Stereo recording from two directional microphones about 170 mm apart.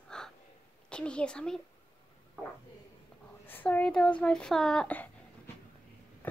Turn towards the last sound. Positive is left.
turn(degrees=10)  # may be behind; listen again after turning